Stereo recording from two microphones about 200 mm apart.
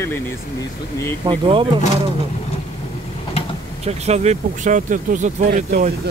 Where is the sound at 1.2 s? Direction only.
25° right (ahead or behind).